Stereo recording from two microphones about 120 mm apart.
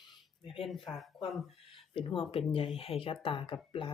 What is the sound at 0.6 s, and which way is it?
Speech, centre (ahead or behind).